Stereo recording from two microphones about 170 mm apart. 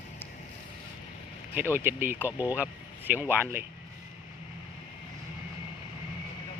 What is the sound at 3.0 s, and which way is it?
Speech, 10° right (ahead or behind).